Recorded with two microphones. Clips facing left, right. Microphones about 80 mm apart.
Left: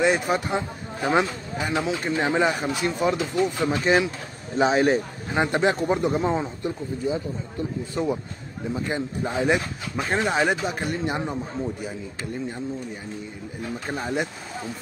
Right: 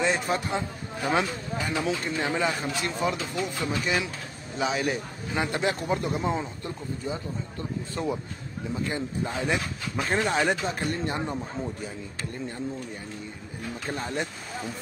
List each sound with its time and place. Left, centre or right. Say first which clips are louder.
0.0 s speech: left 4 dB; left
4.6 s speech: left 8 dB; left
10.0 s speech: left 2 dB; centre
10.3 s speech: left 2 dB; left
13.8 s speech: left 4 dB; centre